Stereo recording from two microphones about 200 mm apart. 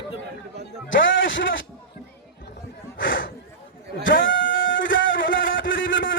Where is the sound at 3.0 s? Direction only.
70° left (ahead or behind).